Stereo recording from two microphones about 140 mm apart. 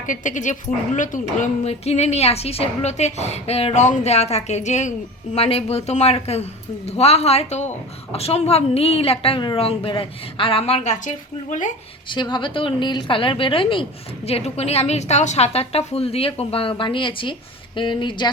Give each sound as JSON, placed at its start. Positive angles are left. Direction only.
{"t": 0.1, "sound": "a woman's voice", "side_deg": 65}
{"t": 12.1, "sound": "a woman's voice", "side_deg": 35}